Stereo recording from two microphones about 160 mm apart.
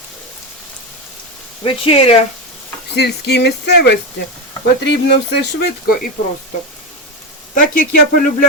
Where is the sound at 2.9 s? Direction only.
90° left.